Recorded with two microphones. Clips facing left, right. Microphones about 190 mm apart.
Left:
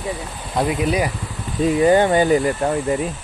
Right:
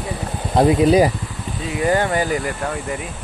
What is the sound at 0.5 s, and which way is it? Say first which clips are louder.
Speech: right 6 dB; 30° right (ahead or behind).